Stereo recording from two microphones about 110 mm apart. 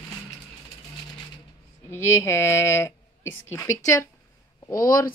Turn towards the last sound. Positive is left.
turn(degrees=35)  # may be behind; listen again after turning